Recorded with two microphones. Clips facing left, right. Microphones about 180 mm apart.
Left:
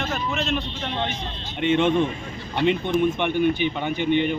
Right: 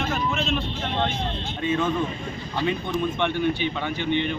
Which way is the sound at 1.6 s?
25° left (ahead or behind).